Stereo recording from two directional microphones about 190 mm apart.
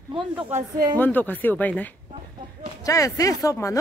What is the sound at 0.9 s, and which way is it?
Speech, 10° left (ahead or behind).